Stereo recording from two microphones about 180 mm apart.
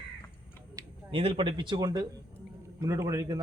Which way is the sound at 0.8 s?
20° right (ahead or behind).